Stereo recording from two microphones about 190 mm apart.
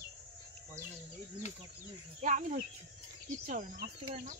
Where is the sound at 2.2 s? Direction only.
40° right (ahead or behind).